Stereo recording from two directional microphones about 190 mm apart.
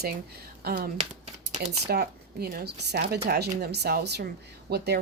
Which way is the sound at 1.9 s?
55° right (ahead or behind).